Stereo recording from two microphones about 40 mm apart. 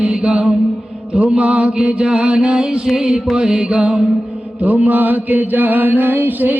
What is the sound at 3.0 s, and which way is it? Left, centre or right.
Music, centre.